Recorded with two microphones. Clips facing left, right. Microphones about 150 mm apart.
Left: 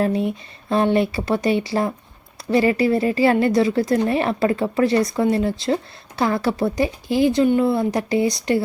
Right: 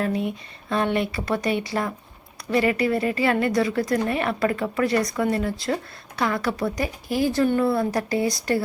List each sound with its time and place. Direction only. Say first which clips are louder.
0.0 s speech: left 4 dB; 30° left (ahead or behind)